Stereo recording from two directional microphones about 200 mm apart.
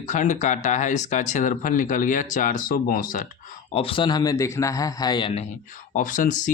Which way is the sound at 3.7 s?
30° left (ahead or behind).